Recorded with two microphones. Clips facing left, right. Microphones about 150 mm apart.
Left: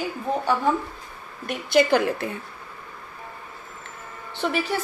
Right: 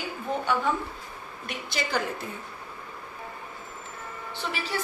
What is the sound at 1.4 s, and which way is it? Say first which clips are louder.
Speech: left 13 dB; 55° left (ahead or behind).